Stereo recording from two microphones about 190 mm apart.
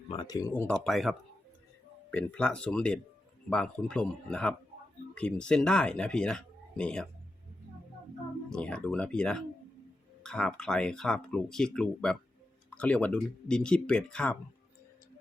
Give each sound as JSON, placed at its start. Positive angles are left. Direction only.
{"t": 0.1, "sound": "speech", "side_deg": 25}
{"t": 0.9, "sound": "speech", "side_deg": 0}
{"t": 8.4, "sound": "speech", "side_deg": 5}